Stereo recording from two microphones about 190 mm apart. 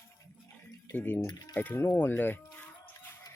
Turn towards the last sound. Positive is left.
turn(degrees=15)  # may be behind; listen again after turning